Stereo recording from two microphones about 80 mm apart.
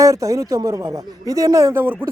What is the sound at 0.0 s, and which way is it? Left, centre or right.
Speech, right.